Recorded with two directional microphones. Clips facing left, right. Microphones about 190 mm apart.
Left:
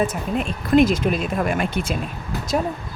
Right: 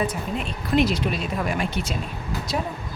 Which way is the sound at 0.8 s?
50° left (ahead or behind).